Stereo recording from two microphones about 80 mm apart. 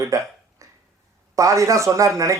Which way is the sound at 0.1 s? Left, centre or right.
Right.